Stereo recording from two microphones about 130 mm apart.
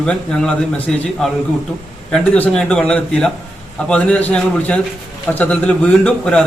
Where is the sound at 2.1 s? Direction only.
5° left (ahead or behind).